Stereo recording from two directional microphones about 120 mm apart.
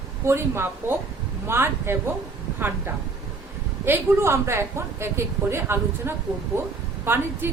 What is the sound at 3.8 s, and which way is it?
Speech, 20° right (ahead or behind).